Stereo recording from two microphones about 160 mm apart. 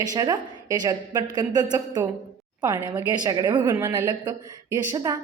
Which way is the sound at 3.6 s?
15° right (ahead or behind).